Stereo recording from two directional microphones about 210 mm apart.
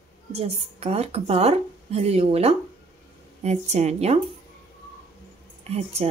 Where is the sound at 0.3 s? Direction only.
30° right (ahead or behind).